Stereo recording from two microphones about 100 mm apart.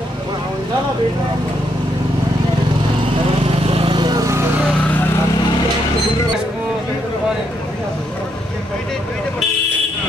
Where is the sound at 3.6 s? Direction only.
70° right (ahead or behind).